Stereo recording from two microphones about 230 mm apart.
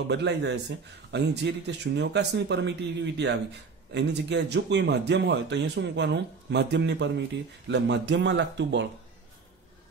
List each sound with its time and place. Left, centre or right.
0.1 s speech: right